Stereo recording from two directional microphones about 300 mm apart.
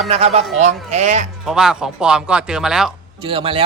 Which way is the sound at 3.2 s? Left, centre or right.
Centre.